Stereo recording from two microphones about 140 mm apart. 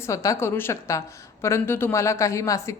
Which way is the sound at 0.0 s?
25° left (ahead or behind).